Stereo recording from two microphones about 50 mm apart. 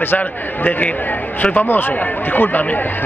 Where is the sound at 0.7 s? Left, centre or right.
Left.